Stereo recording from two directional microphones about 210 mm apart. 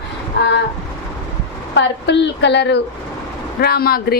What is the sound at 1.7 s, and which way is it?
A woman's voice, 55° left (ahead or behind).